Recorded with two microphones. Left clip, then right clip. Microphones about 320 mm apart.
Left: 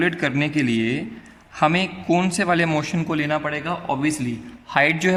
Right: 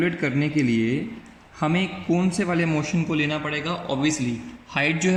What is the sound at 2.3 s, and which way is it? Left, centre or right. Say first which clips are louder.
A man's voice: left 4 dB; left.